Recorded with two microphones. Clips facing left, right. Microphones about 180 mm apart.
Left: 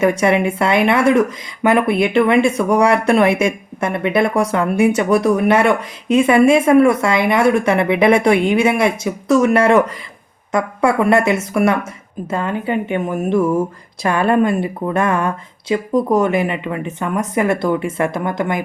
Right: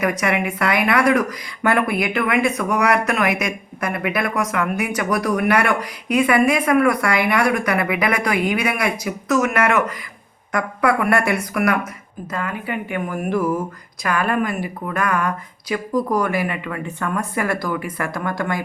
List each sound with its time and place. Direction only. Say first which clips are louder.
0.0 s speech: left 6 dB; 30° left (ahead or behind)